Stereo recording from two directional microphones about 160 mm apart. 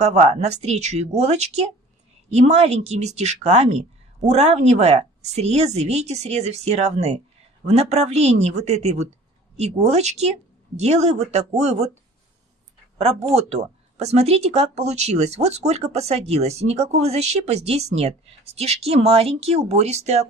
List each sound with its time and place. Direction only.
0.0 s a woman's voice: 45° right (ahead or behind)